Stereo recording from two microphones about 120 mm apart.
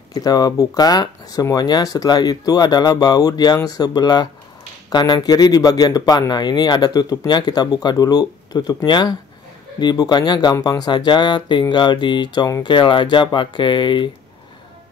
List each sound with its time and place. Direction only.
0.1 s speech: 30° left (ahead or behind)